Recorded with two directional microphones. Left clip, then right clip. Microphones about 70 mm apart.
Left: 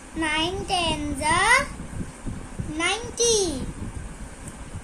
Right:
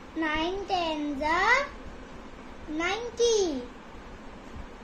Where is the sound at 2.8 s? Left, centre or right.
Left.